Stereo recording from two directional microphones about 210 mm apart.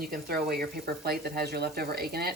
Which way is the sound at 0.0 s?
45° right (ahead or behind).